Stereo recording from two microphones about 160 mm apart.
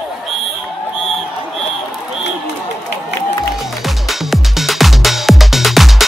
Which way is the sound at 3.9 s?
Centre (ahead or behind).